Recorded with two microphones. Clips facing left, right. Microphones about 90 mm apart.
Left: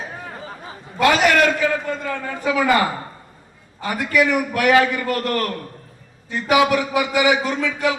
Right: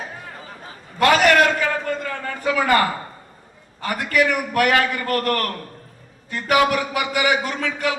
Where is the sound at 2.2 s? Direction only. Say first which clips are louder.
Left 2 dB; 50° right (ahead or behind).